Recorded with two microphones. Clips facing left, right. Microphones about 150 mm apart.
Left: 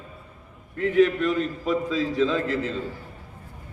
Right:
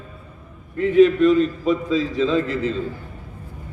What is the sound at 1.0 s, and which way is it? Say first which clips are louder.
A man's voice: right 7 dB; 20° right (ahead or behind).